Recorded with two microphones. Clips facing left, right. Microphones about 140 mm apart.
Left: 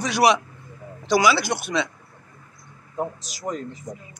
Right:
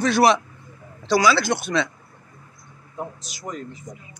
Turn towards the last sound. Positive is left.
turn(degrees=40)  # may be behind; listen again after turning